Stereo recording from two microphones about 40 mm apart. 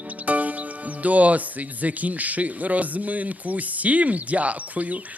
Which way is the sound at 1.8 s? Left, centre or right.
Right.